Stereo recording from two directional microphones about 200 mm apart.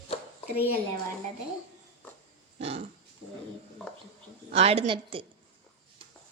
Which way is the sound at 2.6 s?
30° right (ahead or behind).